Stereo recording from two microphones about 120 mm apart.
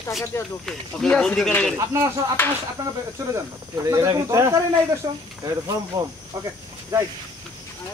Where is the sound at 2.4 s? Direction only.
15° left (ahead or behind).